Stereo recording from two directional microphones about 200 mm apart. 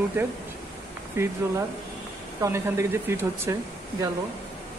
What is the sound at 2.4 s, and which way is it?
Speech, 15° right (ahead or behind).